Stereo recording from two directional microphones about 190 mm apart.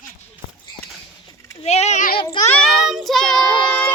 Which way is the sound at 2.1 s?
25° left (ahead or behind).